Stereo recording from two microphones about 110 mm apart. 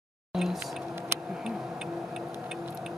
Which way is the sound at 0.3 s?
Centre (ahead or behind).